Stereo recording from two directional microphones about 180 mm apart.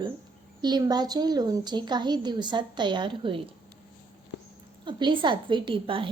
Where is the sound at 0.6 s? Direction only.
20° right (ahead or behind).